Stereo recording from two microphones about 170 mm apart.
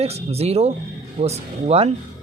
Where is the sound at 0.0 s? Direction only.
35° right (ahead or behind).